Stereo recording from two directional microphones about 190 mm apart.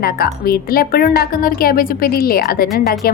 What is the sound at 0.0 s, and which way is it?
A woman's voice, 50° left (ahead or behind).